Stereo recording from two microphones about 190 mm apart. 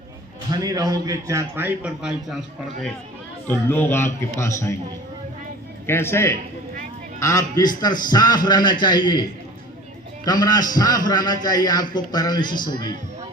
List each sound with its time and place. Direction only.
0.5 s a man's voice: 20° right (ahead or behind)
3.4 s a man's voice: 10° left (ahead or behind)
5.8 s a man's voice: 10° left (ahead or behind)
10.2 s a man's voice: 20° left (ahead or behind)